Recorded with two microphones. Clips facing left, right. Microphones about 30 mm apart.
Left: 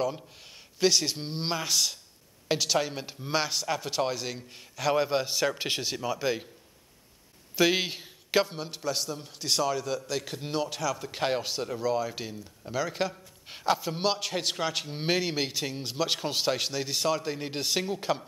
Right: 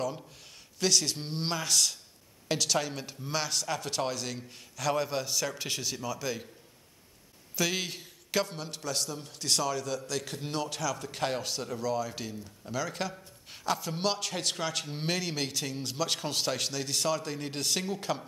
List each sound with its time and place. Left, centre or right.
0.7 s a man's voice: centre
7.5 s a man's voice: left